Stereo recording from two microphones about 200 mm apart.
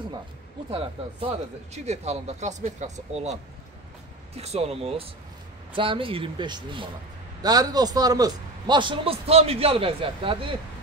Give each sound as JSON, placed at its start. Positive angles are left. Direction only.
{"t": 0.7, "sound": "speech", "side_deg": -25}
{"t": 4.4, "sound": "a man's voice", "side_deg": -30}